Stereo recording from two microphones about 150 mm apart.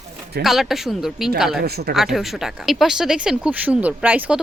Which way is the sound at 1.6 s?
90° right.